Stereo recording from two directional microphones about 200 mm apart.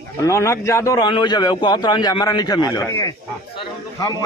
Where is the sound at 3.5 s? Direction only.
20° left (ahead or behind).